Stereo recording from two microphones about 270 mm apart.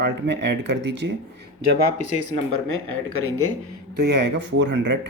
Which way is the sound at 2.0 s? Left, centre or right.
Right.